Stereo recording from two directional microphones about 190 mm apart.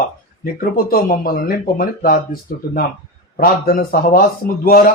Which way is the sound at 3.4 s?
50° left (ahead or behind).